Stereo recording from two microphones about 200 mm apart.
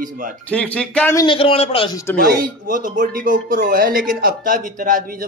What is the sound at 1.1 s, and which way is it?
Speech, 25° left (ahead or behind).